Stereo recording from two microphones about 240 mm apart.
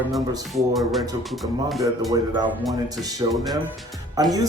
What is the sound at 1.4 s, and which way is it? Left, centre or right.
Speech, centre.